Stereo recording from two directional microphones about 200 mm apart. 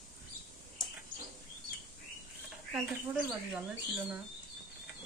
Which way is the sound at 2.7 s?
5° right (ahead or behind).